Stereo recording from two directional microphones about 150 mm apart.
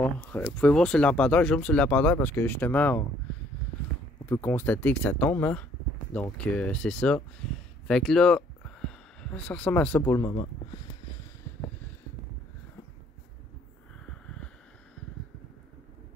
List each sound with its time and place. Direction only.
0.0 s speech: 15° left (ahead or behind)
4.3 s speech: 15° left (ahead or behind)
10.3 s speech: 35° left (ahead or behind)